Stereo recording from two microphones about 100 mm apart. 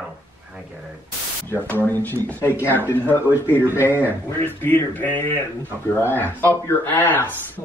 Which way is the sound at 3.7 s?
25° left (ahead or behind).